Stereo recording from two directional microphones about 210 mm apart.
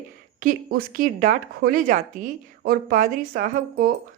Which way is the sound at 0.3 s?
40° right (ahead or behind).